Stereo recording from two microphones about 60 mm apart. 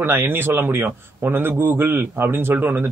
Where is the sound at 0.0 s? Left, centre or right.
Right.